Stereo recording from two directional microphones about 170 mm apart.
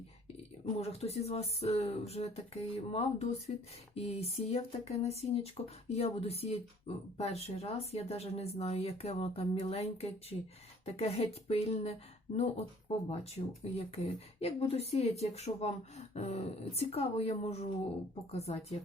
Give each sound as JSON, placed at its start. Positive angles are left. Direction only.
{"t": 0.8, "sound": "speech", "side_deg": 35}
{"t": 13.7, "sound": "speech", "side_deg": 40}